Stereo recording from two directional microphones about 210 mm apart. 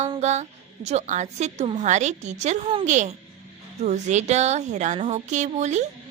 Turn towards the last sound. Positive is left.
turn(degrees=-35)  # may be behind; listen again after turning